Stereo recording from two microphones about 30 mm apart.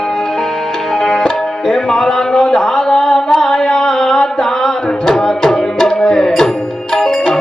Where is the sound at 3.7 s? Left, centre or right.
Left.